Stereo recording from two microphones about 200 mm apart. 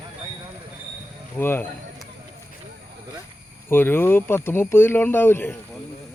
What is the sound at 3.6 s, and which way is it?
Speech, 10° left (ahead or behind).